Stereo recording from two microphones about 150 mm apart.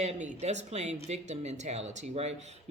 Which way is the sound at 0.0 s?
50° right (ahead or behind).